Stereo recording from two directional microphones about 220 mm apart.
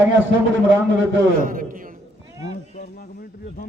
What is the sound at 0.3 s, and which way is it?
Speech, 55° right (ahead or behind).